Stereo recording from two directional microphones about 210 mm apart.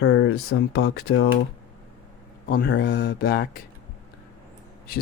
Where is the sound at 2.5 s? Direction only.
45° left (ahead or behind).